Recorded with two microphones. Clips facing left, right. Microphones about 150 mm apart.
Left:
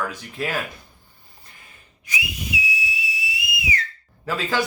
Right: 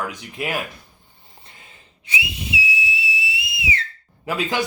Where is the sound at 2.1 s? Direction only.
25° right (ahead or behind).